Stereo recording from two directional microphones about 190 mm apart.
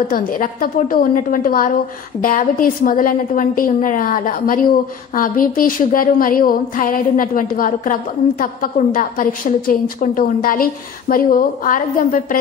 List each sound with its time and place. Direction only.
0.1 s a woman's voice: 45° left (ahead or behind)